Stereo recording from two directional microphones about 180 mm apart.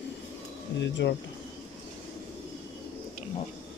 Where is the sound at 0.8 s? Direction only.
75° left (ahead or behind).